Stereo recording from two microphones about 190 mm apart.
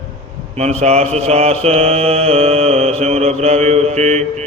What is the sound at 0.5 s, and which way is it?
Mantra, 35° right (ahead or behind).